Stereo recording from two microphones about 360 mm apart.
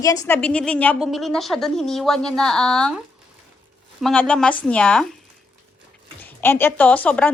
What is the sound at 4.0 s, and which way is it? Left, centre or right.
A woman's voice, centre.